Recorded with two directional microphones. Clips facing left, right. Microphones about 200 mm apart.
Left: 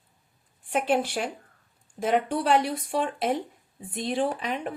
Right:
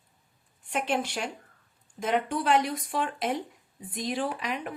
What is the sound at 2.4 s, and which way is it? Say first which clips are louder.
A woman's voice: left 2 dB; 35° left (ahead or behind).